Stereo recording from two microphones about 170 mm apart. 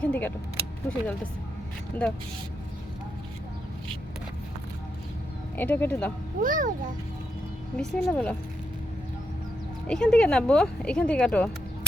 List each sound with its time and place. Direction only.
0.0 s speech: 10° left (ahead or behind)
5.5 s speech: 10° left (ahead or behind)
6.4 s a child's voice: 50° right (ahead or behind)
7.8 s speech: 5° left (ahead or behind)
9.8 s speech: 5° left (ahead or behind)